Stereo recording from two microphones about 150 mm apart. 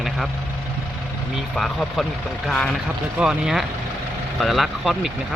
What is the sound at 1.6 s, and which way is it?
Speech, centre (ahead or behind).